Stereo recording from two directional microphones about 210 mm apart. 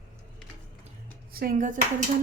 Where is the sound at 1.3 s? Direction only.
40° right (ahead or behind).